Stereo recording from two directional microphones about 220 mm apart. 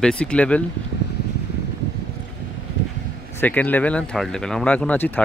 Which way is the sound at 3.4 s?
5° left (ahead or behind).